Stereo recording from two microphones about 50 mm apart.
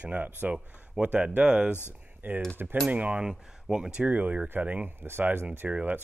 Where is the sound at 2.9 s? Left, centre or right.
Right.